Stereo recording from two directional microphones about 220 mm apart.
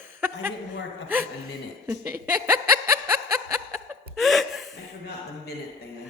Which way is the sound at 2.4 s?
10° right (ahead or behind).